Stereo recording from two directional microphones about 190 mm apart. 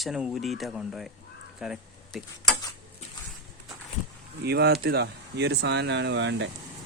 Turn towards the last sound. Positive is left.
turn(degrees=-70)  # may be behind; listen again after turning